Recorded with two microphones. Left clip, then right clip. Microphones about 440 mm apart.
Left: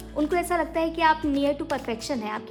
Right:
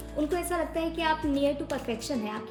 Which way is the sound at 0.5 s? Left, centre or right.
Left.